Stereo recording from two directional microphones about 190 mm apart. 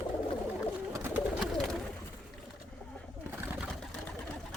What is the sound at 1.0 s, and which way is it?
Bird, 10° right (ahead or behind).